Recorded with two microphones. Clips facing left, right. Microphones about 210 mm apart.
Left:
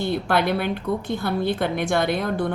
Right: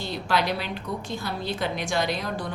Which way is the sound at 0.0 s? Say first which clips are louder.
Left 5 dB; 55° left (ahead or behind).